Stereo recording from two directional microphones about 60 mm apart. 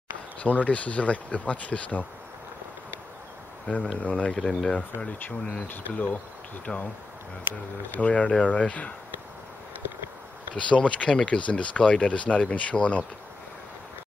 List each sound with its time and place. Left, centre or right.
0.4 s speech: left
3.6 s speech: left
5.7 s speech: left
7.9 s speech: left
10.5 s speech: centre